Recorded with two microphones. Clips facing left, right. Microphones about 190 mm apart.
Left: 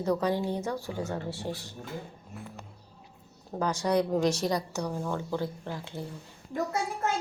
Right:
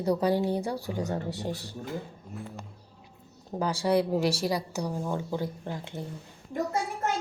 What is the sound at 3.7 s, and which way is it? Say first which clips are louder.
Speech: right 3 dB; 30° right (ahead or behind).